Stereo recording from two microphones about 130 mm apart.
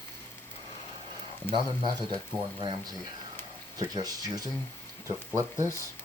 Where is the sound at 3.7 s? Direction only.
30° right (ahead or behind).